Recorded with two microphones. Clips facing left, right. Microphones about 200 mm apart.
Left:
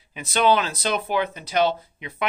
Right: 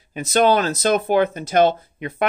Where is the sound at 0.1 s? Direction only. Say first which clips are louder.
Right 4 dB; 45° right (ahead or behind).